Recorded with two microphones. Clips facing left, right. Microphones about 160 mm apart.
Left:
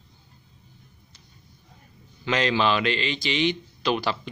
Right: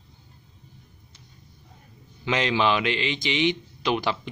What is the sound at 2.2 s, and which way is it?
A man's voice, 20° right (ahead or behind).